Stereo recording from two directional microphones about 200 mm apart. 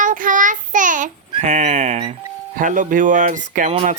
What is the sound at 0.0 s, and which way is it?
Child singing, 40° right (ahead or behind).